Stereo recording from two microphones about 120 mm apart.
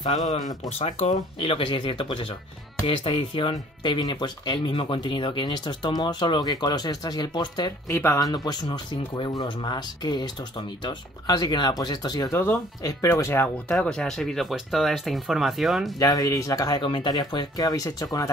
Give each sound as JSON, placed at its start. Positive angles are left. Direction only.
{"t": 0.1, "sound": "speech", "side_deg": 65}
{"t": 1.4, "sound": "speech", "side_deg": 45}
{"t": 7.9, "sound": "speech", "side_deg": 20}
{"t": 8.3, "sound": "speech", "side_deg": 35}
{"t": 12.3, "sound": "speech", "side_deg": 20}
{"t": 16.0, "sound": "speech", "side_deg": 30}